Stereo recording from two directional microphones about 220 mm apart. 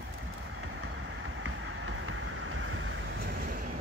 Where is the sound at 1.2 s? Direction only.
60° right (ahead or behind).